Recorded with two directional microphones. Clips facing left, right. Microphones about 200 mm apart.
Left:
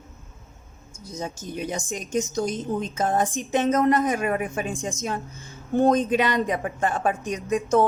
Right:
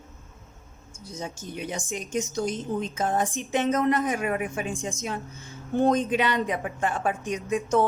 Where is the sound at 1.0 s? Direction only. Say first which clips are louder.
Left 3 dB; 40° left (ahead or behind).